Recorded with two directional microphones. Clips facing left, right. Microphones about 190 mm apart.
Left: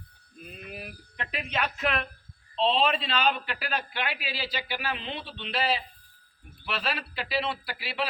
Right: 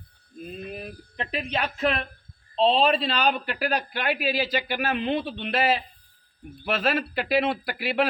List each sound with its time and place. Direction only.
0.4 s speech: 30° right (ahead or behind); by 8.0 s 50° right (ahead or behind)